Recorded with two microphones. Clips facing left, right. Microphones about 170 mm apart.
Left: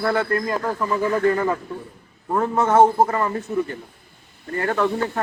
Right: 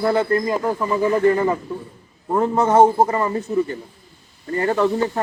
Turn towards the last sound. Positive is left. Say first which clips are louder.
# right 3 dB
turn(degrees=-10)  # may be behind; listen again after turning